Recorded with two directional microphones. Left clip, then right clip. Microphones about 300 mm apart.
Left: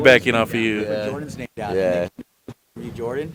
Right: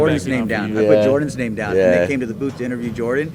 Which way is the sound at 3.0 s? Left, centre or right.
Right.